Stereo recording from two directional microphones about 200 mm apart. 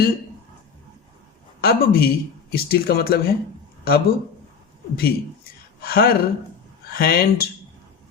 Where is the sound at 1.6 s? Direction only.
50° left (ahead or behind).